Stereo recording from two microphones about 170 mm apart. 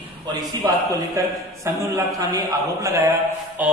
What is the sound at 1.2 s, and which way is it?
A man's voice, 20° right (ahead or behind).